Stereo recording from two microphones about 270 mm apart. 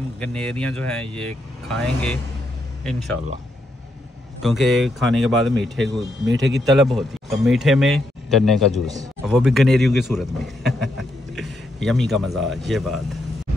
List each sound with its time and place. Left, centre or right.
0.2 s a man's voice: centre
4.4 s a man's voice: centre
6.2 s speech: right
6.6 s a man's voice: centre